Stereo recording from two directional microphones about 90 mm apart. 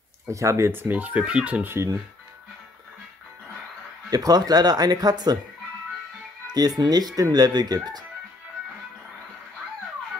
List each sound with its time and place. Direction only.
0.3 s speech: 35° right (ahead or behind); by 1.7 s 15° right (ahead or behind)
4.1 s speech: 45° right (ahead or behind)
6.5 s speech: 45° right (ahead or behind)